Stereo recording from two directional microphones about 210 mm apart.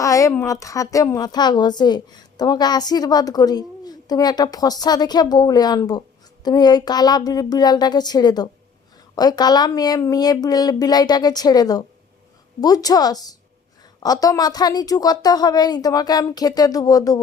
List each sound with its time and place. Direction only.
0.0 s a woman's voice: 15° left (ahead or behind)